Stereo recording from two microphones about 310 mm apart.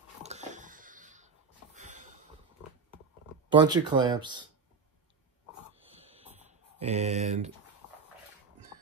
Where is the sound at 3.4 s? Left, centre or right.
Centre.